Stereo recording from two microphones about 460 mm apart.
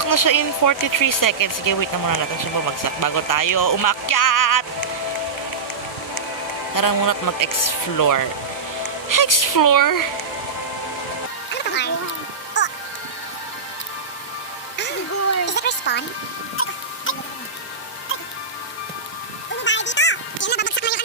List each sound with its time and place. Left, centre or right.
0.0 s speech: left
6.7 s speech: left
11.5 s music: left
15.4 s a sound: left
16.6 s music: left
19.6 s music: left